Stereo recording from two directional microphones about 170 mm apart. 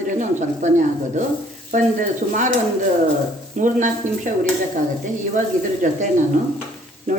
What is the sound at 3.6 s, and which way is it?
Speech, 50° right (ahead or behind).